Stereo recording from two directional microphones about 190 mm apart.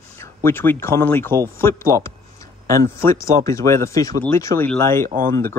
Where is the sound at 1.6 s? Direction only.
15° left (ahead or behind).